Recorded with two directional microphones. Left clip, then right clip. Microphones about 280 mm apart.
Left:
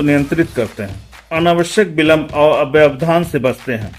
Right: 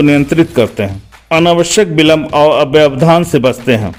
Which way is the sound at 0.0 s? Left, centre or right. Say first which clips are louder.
Right 5 dB; right.